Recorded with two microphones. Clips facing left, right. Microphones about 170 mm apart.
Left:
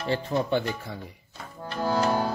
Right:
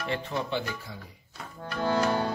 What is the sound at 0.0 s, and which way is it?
Speech, 35° left (ahead or behind).